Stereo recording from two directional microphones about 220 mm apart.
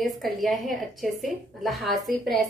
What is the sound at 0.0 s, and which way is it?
A woman's voice, centre (ahead or behind).